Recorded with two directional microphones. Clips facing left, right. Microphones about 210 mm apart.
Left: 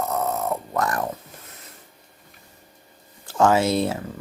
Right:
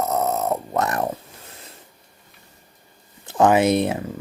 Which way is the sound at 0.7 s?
25° right (ahead or behind).